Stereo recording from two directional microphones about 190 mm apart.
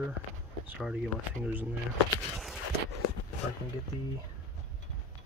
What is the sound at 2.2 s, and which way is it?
Walk, centre (ahead or behind).